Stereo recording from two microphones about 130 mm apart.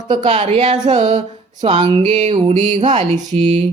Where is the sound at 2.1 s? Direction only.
55° right (ahead or behind).